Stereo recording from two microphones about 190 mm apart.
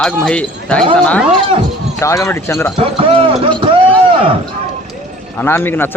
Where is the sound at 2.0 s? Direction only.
15° left (ahead or behind).